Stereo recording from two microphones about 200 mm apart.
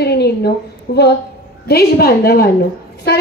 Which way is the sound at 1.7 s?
50° left (ahead or behind).